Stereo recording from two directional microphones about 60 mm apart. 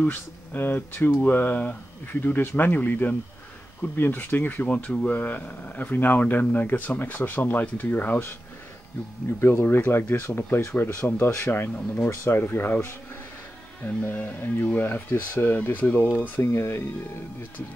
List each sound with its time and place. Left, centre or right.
0.1 s speech: left
9.4 s speech: left
11.7 s speech: left
12.1 s speech: left
14.0 s speech: left
16.3 s speech: left